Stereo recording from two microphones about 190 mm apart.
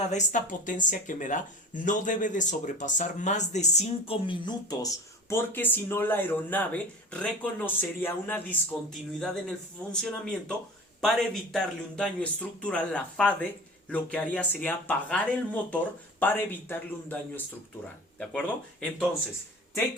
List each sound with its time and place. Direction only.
0.1 s speech: 40° left (ahead or behind); by 19.0 s 5° left (ahead or behind)